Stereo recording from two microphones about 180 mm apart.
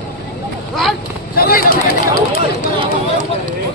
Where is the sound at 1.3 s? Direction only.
55° left (ahead or behind).